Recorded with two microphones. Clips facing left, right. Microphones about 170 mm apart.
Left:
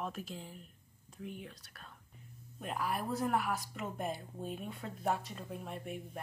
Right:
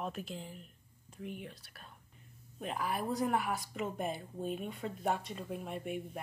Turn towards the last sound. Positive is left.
turn(degrees=-5)  # may be behind; listen again after turning